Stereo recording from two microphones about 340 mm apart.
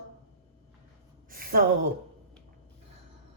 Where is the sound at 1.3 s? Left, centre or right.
Right.